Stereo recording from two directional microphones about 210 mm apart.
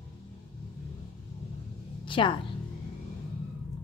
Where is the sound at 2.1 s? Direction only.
25° left (ahead or behind).